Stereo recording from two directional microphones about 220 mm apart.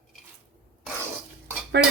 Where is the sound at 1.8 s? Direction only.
50° right (ahead or behind).